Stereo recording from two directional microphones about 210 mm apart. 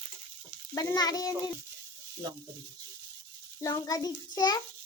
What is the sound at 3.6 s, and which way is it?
Speech, 20° left (ahead or behind).